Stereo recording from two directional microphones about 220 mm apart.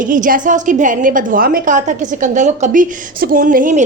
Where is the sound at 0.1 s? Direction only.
35° right (ahead or behind).